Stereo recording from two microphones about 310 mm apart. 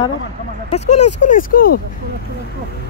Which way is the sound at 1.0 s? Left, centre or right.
Left.